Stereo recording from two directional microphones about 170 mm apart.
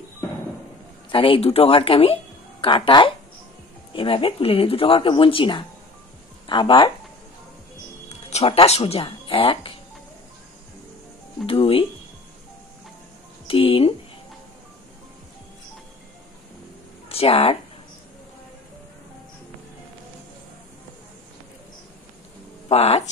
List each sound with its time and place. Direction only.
1.1 s speech: 30° left (ahead or behind)
8.3 s speech: 35° left (ahead or behind)
11.4 s speech: 30° left (ahead or behind)
13.5 s speech: 35° left (ahead or behind)
17.1 s speech: 35° left (ahead or behind)
22.7 s speech: 40° left (ahead or behind)